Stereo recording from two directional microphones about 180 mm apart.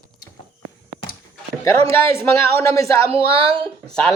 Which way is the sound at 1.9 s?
15° left (ahead or behind).